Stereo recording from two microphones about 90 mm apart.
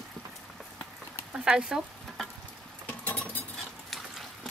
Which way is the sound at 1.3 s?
10° right (ahead or behind).